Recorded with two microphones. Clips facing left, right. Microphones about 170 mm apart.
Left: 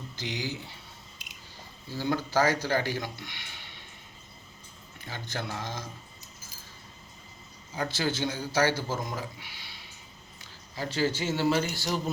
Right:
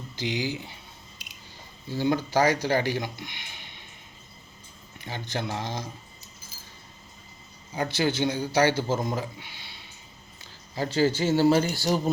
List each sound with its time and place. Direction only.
0.2 s speech: 15° right (ahead or behind)
1.9 s speech: 20° right (ahead or behind)
4.9 s speech: 20° right (ahead or behind)
7.8 s speech: 15° right (ahead or behind)
10.8 s speech: 30° right (ahead or behind)